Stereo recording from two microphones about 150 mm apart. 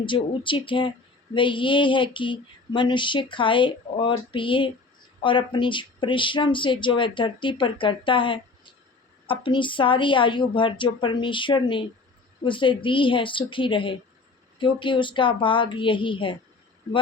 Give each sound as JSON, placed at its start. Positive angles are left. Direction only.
{"t": 0.0, "sound": "speech", "side_deg": 35}